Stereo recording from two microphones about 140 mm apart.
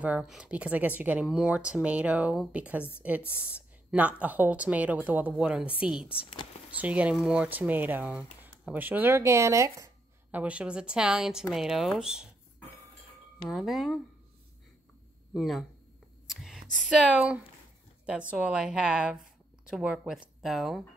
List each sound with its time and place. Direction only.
0.0 s speech: 5° right (ahead or behind)
6.0 s speech: 40° left (ahead or behind)
6.7 s speech: 10° right (ahead or behind)
10.3 s speech: 10° right (ahead or behind)
13.5 s speech: centre (ahead or behind)
15.3 s speech: centre (ahead or behind)
16.3 s a sound: centre (ahead or behind)
17.2 s speech: 10° right (ahead or behind)